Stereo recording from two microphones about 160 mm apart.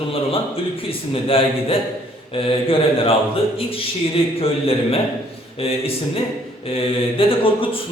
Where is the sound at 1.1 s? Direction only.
35° left (ahead or behind).